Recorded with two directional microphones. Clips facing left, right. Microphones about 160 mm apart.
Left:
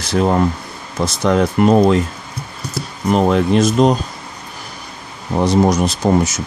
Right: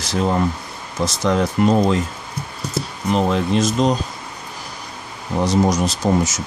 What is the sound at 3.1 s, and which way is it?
Speech, 55° left (ahead or behind).